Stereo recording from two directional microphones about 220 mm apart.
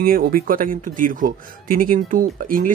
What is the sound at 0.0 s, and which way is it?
Speech, 40° right (ahead or behind).